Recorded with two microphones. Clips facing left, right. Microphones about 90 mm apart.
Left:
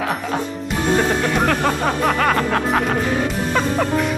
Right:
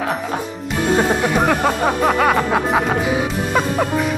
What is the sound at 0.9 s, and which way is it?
Music, 10° right (ahead or behind).